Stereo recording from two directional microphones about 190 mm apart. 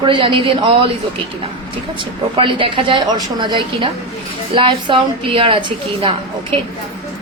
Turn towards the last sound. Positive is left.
turn(degrees=-30)  # may be behind; listen again after turning